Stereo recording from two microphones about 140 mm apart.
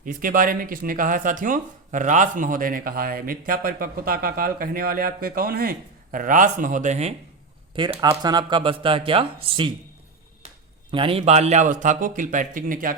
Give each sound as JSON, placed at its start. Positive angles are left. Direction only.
{"t": 0.0, "sound": "speech", "side_deg": -80}
{"t": 7.8, "sound": "speech", "side_deg": -45}
{"t": 8.2, "sound": "speech", "side_deg": -30}
{"t": 10.9, "sound": "a man's voice", "side_deg": -40}